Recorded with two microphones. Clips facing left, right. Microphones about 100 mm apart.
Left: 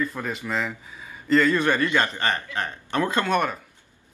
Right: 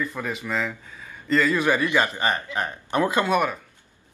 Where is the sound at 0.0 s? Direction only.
Centre (ahead or behind).